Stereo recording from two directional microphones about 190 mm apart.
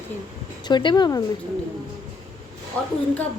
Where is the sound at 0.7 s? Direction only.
25° left (ahead or behind).